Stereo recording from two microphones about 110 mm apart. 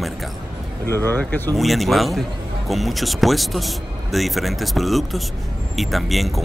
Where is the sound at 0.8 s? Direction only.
20° left (ahead or behind).